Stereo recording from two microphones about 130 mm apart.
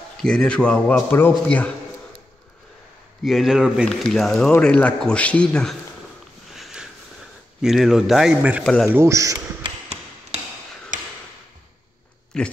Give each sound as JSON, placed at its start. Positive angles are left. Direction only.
{"t": 0.2, "sound": "a man's voice", "side_deg": 5}
{"t": 3.3, "sound": "a man's voice", "side_deg": 0}
{"t": 6.5, "sound": "sniff", "side_deg": -5}
{"t": 7.6, "sound": "speech", "side_deg": -5}
{"t": 10.3, "sound": "tick-tock", "side_deg": -55}
{"t": 10.9, "sound": "tick-tock", "side_deg": -80}
{"t": 12.3, "sound": "speech", "side_deg": 5}